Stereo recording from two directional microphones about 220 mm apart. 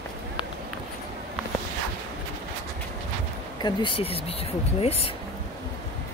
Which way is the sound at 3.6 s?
25° left (ahead or behind).